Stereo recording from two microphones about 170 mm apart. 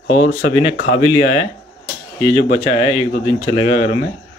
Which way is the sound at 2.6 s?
35° left (ahead or behind).